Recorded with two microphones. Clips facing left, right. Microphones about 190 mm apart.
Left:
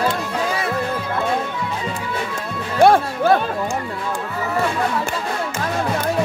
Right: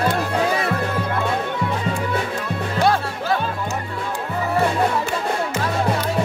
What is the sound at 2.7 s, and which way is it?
Music, 55° left (ahead or behind).